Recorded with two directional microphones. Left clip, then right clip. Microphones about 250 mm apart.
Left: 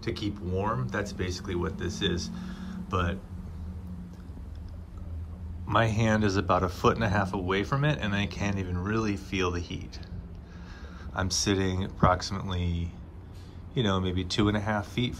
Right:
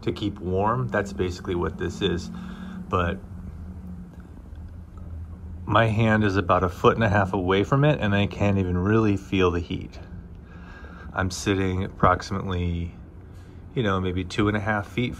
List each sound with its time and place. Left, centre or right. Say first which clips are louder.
0.0 s speech: right 5 dB; centre
5.8 s speech: right 5 dB; centre
11.1 s speech: right 3 dB; centre